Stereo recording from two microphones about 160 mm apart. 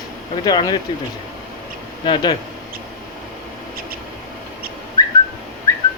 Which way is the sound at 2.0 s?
30° left (ahead or behind).